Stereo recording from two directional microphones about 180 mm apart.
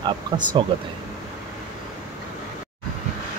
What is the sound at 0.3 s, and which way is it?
Speech, 25° right (ahead or behind).